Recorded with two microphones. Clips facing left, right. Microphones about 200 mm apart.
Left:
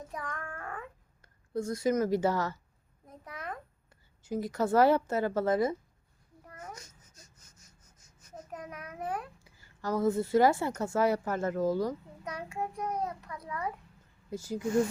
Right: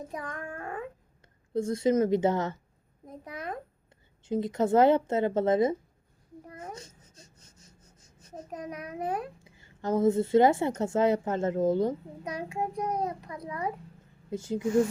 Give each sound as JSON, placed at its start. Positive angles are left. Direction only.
{"t": 0.2, "sound": "a child's voice", "side_deg": -25}
{"t": 4.3, "sound": "a child's voice", "side_deg": -25}
{"t": 6.6, "sound": "baby cry", "side_deg": -30}
{"t": 8.5, "sound": "a child's voice", "side_deg": -15}
{"t": 9.0, "sound": "a child's voice", "side_deg": -25}
{"t": 13.4, "sound": "a child's voice", "side_deg": -20}